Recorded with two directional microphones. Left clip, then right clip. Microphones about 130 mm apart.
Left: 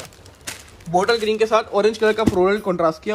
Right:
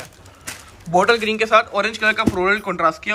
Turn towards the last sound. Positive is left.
turn(degrees=40)  # may be behind; listen again after turning